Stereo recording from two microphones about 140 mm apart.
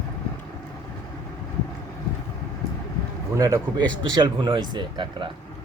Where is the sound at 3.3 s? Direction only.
25° right (ahead or behind).